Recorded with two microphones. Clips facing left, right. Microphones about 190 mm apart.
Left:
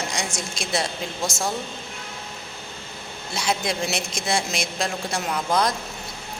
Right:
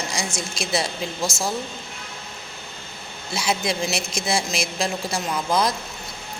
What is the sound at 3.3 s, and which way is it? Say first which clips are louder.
A man's voice: right 1 dB; 5° right (ahead or behind).